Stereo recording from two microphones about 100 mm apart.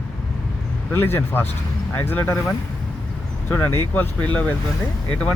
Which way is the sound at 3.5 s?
20° left (ahead or behind).